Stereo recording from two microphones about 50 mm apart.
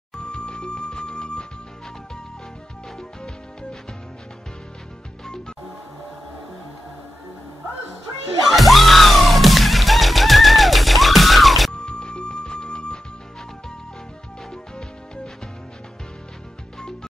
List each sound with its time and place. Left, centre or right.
0.1 s music: centre
8.5 s music: centre
11.7 s music: centre